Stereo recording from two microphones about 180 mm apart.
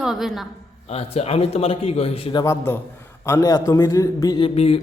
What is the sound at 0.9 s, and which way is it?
A man's voice, 35° left (ahead or behind).